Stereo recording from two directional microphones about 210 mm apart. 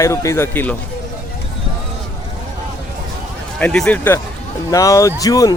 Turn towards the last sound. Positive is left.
turn(degrees=15)  # may be behind; listen again after turning